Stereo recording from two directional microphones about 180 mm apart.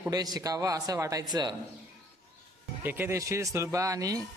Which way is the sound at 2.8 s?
10° right (ahead or behind).